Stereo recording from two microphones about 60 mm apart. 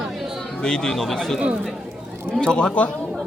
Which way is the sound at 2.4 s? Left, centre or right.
Centre.